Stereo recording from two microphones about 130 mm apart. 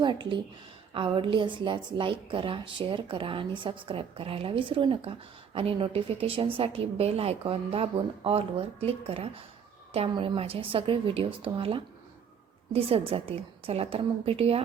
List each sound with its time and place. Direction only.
0.0 s a woman's voice: 35° right (ahead or behind)